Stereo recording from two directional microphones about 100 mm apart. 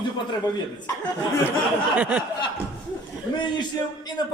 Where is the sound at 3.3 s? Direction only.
50° left (ahead or behind).